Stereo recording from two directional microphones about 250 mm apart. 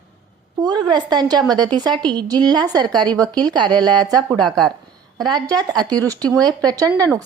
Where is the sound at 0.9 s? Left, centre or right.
Centre.